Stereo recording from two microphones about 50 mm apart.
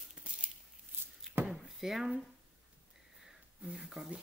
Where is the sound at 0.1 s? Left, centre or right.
Right.